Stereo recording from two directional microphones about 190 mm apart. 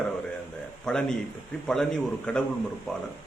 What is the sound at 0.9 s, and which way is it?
A man's voice, 5° left (ahead or behind).